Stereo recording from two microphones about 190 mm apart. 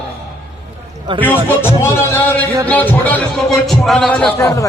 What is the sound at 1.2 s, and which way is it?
A man's voice, 10° left (ahead or behind).